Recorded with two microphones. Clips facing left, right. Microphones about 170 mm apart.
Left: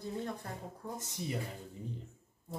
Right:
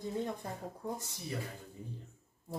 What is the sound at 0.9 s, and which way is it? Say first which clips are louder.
Speech: left 5 dB; 20° left (ahead or behind).